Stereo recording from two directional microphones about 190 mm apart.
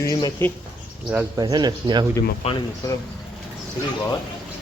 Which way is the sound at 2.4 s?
35° left (ahead or behind).